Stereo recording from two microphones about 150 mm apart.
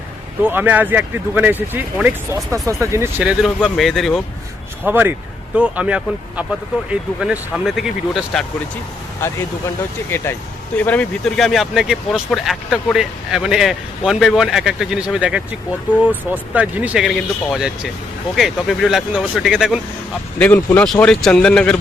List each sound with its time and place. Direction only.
0.4 s speech: 10° right (ahead or behind)
3.4 s speech: centre (ahead or behind)
4.9 s speech: 10° right (ahead or behind)
10.1 s speech: 15° left (ahead or behind); by 19.8 s 5° right (ahead or behind)
20.4 s speech: 10° left (ahead or behind)